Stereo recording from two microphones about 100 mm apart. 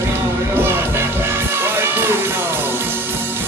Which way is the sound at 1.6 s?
25° right (ahead or behind).